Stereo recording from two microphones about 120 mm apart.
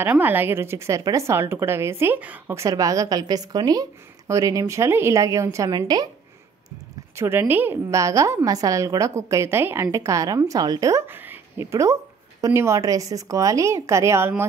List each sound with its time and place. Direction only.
0.0 s a woman's voice: 15° right (ahead or behind); by 6.0 s 35° right (ahead or behind)
7.2 s a woman's voice: 20° right (ahead or behind)